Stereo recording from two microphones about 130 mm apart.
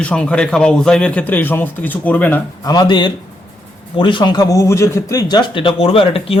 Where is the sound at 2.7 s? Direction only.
35° left (ahead or behind).